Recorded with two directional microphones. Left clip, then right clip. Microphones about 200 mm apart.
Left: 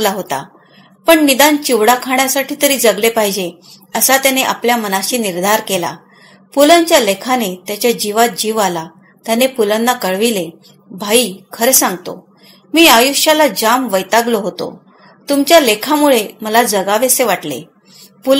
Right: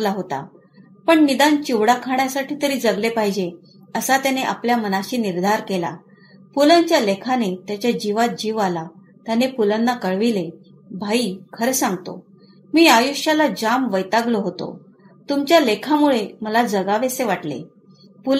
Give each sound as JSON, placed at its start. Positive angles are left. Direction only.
{"t": 1.0, "sound": "a woman's voice", "side_deg": 20}